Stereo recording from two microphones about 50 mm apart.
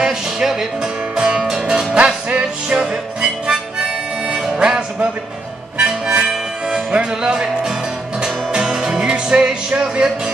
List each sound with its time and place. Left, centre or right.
0.0 s speech: centre
1.1 s music: centre
2.0 s music: right
2.4 s music: centre
4.6 s music: centre
5.8 s harmonica: centre
6.7 s music: centre